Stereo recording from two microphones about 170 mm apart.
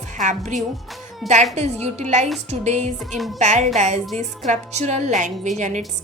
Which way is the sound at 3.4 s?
45° right (ahead or behind).